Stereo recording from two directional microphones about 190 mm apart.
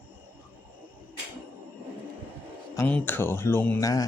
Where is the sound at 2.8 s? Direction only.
10° left (ahead or behind).